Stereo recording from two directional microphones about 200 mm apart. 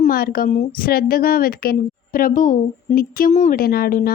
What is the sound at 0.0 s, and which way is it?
Speech, 50° left (ahead or behind).